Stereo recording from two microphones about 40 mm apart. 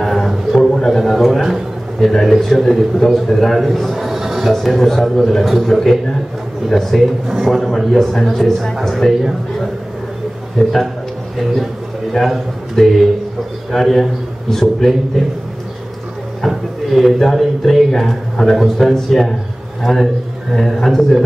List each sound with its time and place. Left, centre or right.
0.0 s a sound: centre
0.7 s a man's voice: centre
12.1 s a man's voice: centre
16.3 s a sound: centre
17.4 s a man's voice: centre
17.9 s speech: centre